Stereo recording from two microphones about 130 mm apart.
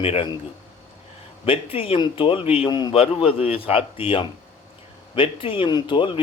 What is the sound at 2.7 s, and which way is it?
Speech, 35° left (ahead or behind).